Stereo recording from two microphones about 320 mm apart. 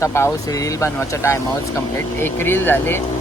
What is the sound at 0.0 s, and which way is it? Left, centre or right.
Speech, centre.